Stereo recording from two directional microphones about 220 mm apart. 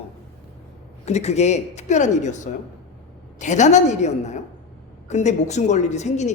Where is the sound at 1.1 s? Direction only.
30° left (ahead or behind).